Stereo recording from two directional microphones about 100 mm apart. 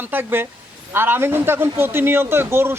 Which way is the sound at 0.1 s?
20° right (ahead or behind).